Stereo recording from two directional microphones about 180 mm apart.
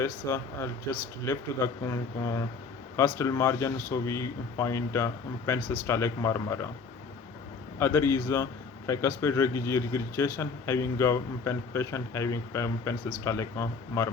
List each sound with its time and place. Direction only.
0.0 s a man's voice: 15° left (ahead or behind)
7.8 s a man's voice: 15° left (ahead or behind)